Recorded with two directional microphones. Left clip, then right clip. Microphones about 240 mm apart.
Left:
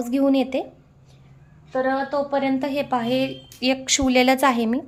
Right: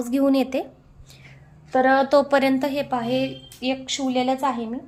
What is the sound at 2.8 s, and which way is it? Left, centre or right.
A woman's voice, centre.